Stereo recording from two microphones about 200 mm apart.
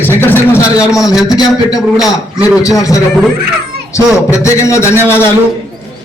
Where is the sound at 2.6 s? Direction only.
15° left (ahead or behind).